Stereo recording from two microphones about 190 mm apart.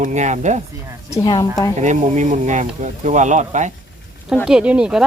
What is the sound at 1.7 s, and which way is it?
Speech, 40° right (ahead or behind).